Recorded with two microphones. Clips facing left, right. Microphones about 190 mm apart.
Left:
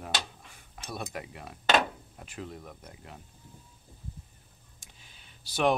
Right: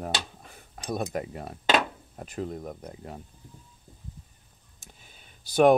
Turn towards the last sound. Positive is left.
turn(degrees=-50)  # may be behind; listen again after turning